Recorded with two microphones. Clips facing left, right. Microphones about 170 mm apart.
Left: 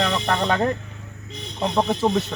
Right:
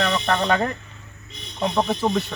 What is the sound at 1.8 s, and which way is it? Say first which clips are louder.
Speech: left 2 dB; centre (ahead or behind).